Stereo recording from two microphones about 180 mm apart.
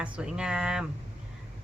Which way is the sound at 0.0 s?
5° right (ahead or behind).